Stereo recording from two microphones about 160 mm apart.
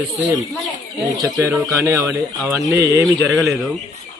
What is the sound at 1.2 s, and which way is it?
Speech, 20° right (ahead or behind).